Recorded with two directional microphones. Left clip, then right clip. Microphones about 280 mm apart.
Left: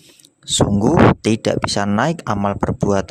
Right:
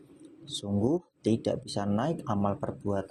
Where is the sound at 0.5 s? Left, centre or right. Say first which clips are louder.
Left 15 dB; left.